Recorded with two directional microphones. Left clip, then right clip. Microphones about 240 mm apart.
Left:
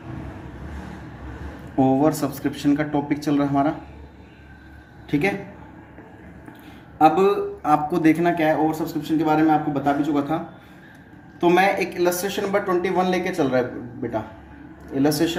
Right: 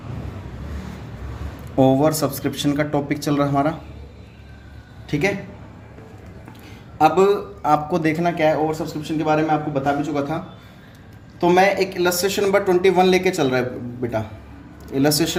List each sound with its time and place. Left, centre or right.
1.7 s speech: right
5.0 s speech: right
7.0 s speech: right
11.3 s speech: right
14.9 s speech: right